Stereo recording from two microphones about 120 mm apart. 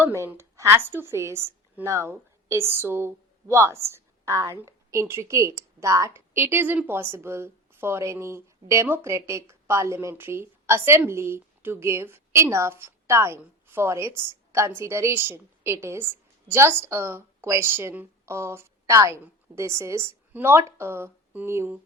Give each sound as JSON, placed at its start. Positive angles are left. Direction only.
{"t": 0.2, "sound": "a woman's voice", "side_deg": -20}